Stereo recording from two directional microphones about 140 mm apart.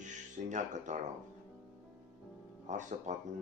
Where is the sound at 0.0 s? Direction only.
60° right (ahead or behind).